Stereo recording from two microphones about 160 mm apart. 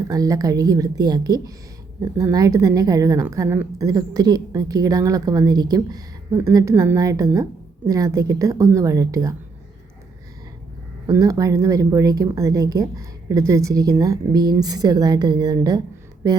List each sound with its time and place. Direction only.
0.1 s a woman's voice: 20° right (ahead or behind)
11.1 s a woman's voice: 20° right (ahead or behind)